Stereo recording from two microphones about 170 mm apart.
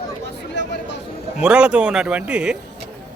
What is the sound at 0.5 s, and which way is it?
Chatter, 90° left.